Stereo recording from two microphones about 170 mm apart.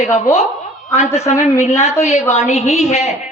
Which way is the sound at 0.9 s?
40° left (ahead or behind).